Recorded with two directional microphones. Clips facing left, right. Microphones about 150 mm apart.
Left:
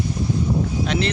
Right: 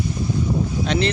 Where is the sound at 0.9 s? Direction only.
Centre (ahead or behind).